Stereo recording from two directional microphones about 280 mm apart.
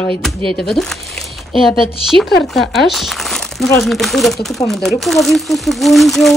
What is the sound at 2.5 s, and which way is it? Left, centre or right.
Speech, centre.